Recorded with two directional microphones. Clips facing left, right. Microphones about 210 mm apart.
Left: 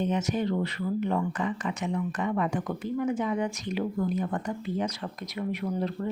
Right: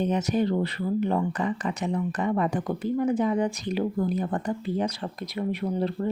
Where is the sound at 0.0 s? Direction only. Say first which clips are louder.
Right 3 dB; 35° right (ahead or behind).